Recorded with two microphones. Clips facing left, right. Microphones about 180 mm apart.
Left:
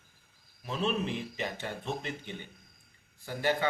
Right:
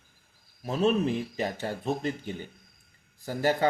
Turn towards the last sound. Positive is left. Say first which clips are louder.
# right 4 dB
turn(degrees=-40)  # may be behind; listen again after turning